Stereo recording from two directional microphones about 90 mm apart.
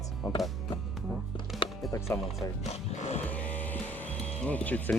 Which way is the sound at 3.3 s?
15° left (ahead or behind).